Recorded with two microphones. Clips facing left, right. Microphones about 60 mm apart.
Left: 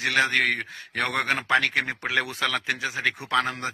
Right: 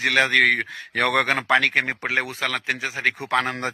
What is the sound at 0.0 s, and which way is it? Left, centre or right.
A man's voice, right.